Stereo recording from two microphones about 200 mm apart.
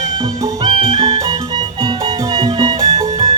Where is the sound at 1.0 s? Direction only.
25° right (ahead or behind).